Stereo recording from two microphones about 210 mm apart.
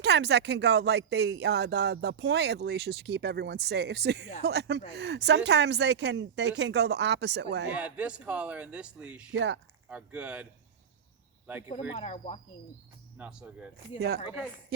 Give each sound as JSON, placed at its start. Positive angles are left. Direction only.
{"t": 0.0, "sound": "speech", "side_deg": -55}
{"t": 7.7, "sound": "speech", "side_deg": -5}
{"t": 9.3, "sound": "speech", "side_deg": -60}
{"t": 9.9, "sound": "speech", "side_deg": -5}
{"t": 11.9, "sound": "speech", "side_deg": 30}
{"t": 13.1, "sound": "speech", "side_deg": -5}